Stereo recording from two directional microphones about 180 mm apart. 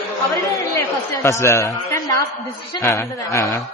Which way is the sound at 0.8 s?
15° left (ahead or behind).